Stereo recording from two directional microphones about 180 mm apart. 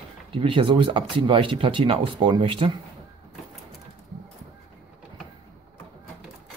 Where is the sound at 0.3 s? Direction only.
30° right (ahead or behind).